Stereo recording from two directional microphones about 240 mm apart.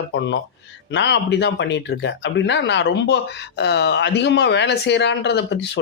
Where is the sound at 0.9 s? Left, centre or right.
Left.